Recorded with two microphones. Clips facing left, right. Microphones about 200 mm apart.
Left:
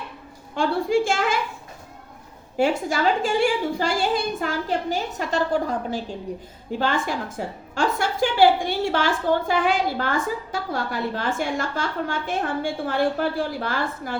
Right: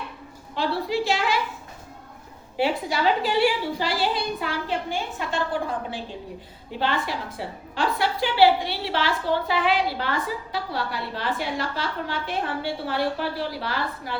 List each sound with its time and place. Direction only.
0.5 s a woman's voice: 50° left (ahead or behind)
2.6 s a woman's voice: 45° left (ahead or behind)